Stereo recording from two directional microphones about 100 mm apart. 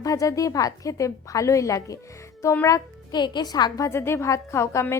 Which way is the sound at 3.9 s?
25° left (ahead or behind).